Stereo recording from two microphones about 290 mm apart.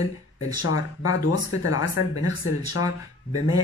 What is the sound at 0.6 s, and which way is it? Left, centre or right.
Speech, left.